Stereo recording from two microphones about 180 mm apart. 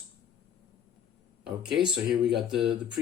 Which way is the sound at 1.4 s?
5° right (ahead or behind).